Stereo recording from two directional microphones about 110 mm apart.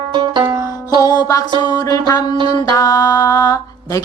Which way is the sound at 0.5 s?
30° right (ahead or behind).